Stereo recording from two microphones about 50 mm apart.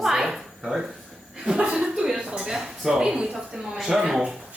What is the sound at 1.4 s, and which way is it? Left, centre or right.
A woman's voice, centre.